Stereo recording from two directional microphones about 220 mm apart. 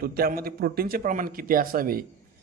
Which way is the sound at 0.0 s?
45° right (ahead or behind).